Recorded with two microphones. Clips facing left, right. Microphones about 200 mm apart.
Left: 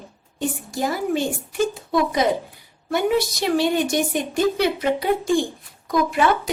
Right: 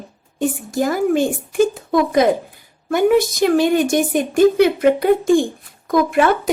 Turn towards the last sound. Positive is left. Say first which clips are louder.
# right 4 dB
turn(degrees=-50)  # may be behind; listen again after turning